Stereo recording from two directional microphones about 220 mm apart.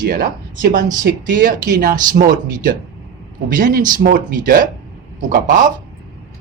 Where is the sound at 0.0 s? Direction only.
40° right (ahead or behind).